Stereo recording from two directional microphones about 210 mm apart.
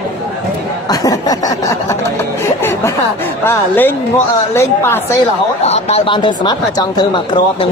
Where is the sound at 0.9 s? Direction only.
15° left (ahead or behind).